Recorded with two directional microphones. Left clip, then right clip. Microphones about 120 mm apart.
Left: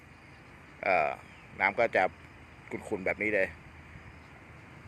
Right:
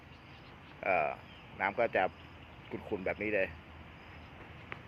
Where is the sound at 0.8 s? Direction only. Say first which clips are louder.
Left 4 dB; 40° left (ahead or behind).